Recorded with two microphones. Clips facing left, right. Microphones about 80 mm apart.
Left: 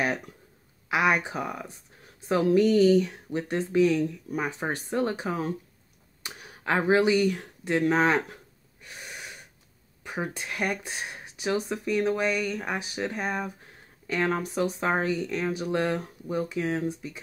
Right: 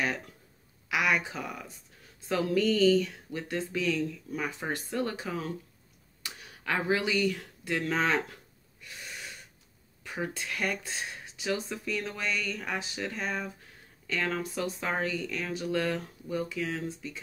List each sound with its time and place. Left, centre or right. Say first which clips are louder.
0.8 s speech: left 4 dB; left
8.8 s gasp: left 2 dB; centre
10.0 s speech: left 2 dB; left